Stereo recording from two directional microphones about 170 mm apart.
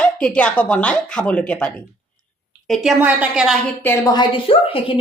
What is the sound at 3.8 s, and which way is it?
A woman's voice, 25° left (ahead or behind).